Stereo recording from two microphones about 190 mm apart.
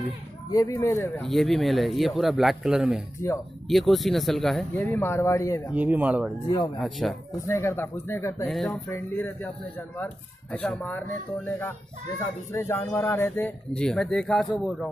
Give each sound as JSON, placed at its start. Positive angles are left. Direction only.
{"t": 0.5, "sound": "a man's voice", "side_deg": 20}
{"t": 1.2, "sound": "speech", "side_deg": 0}
{"t": 3.2, "sound": "a man's voice", "side_deg": 15}
{"t": 3.6, "sound": "speech", "side_deg": 0}
{"t": 5.7, "sound": "speech", "side_deg": -10}
{"t": 7.4, "sound": "a man's voice", "side_deg": 15}
{"t": 8.5, "sound": "speech", "side_deg": 0}
{"t": 8.9, "sound": "a man's voice", "side_deg": 10}
{"t": 12.5, "sound": "speech", "side_deg": 15}